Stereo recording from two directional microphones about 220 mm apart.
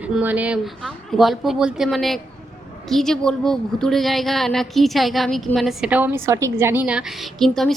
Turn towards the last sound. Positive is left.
turn(degrees=0)  # may be behind; listen again after turning